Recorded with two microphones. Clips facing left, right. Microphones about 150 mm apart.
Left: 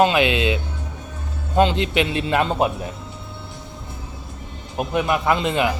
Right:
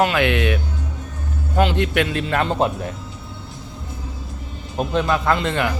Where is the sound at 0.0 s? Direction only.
15° left (ahead or behind).